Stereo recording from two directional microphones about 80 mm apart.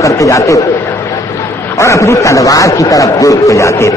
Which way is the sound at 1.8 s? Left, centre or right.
Left.